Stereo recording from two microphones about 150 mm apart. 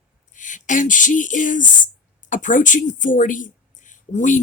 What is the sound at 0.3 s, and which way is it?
Speech, 55° left (ahead or behind).